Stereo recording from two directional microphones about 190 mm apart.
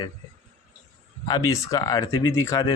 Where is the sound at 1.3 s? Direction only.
15° left (ahead or behind).